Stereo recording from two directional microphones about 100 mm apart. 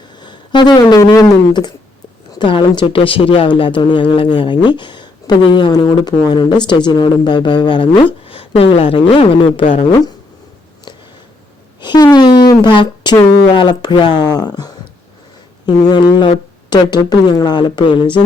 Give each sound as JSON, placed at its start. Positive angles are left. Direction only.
{"t": 0.2, "sound": "speech", "side_deg": 50}
{"t": 11.8, "sound": "a woman's voice", "side_deg": 45}
{"t": 17.0, "sound": "speech", "side_deg": 40}